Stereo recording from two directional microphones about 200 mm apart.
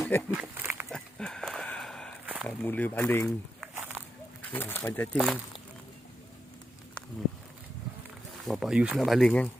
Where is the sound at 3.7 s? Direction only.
10° right (ahead or behind).